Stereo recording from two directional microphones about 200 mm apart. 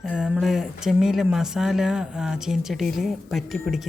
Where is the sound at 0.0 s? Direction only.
5° right (ahead or behind).